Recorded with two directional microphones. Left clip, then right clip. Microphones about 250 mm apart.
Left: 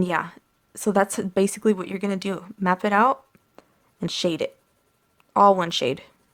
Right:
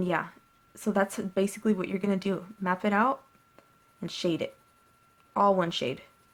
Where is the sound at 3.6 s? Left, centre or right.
Left.